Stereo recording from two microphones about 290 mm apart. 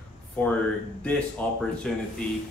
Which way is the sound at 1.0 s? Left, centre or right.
Centre.